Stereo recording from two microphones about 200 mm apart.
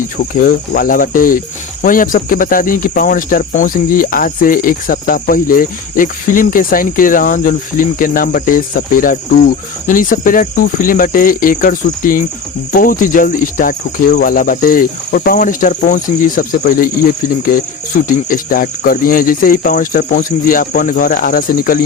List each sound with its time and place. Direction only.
0.0 s cricket: 45° left (ahead or behind)